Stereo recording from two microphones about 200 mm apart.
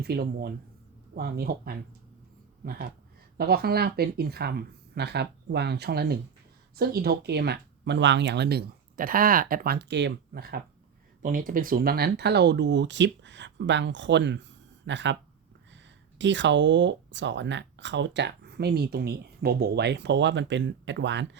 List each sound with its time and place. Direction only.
0.0 s speech: 55° right (ahead or behind)